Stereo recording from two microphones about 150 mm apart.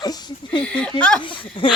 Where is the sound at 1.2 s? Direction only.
35° left (ahead or behind).